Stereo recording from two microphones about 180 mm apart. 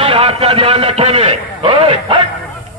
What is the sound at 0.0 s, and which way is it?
A man's voice, 30° right (ahead or behind).